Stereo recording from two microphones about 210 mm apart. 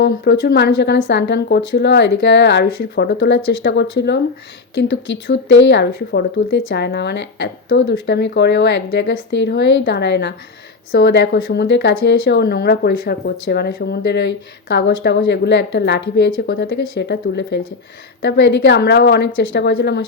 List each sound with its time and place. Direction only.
0.0 s speech: 50° left (ahead or behind)
5.3 s a woman's voice: 60° left (ahead or behind)